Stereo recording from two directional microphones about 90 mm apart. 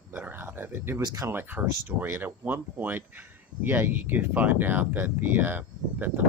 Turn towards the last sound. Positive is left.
turn(degrees=-20)  # may be behind; listen again after turning